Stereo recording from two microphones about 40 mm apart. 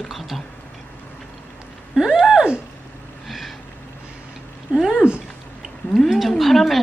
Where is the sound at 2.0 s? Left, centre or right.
Centre.